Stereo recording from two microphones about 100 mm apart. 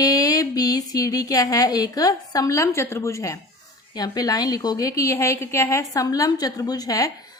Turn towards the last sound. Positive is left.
turn(degrees=35)  # may be behind; listen again after turning